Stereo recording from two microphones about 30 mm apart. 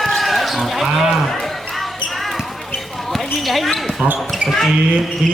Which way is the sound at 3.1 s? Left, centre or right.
Centre.